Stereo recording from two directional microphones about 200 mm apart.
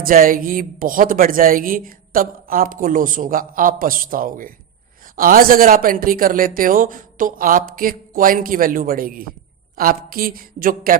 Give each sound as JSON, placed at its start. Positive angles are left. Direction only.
{"t": 0.0, "sound": "a woman's voice", "side_deg": -45}